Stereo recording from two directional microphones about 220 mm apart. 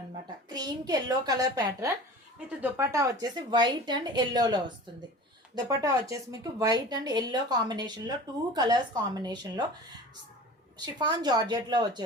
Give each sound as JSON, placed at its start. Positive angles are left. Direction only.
{"t": 0.4, "sound": "a woman's voice", "side_deg": -20}
{"t": 10.8, "sound": "speech", "side_deg": -20}